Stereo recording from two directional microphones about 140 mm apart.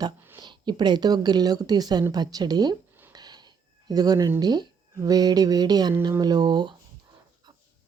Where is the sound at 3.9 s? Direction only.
25° right (ahead or behind).